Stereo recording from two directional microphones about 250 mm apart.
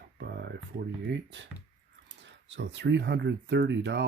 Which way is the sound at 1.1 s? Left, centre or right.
Right.